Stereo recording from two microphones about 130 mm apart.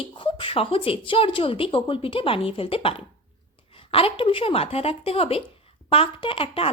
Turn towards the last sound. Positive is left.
turn(degrees=45)  # may be behind; listen again after turning